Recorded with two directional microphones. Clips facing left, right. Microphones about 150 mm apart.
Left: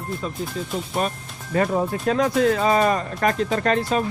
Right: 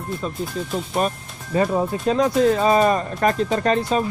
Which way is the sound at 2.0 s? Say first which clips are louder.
Right 2 dB; 25° right (ahead or behind).